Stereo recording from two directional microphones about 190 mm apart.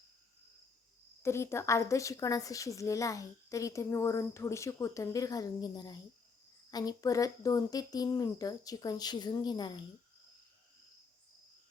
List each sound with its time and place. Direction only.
1.2 s a woman's voice: 15° left (ahead or behind)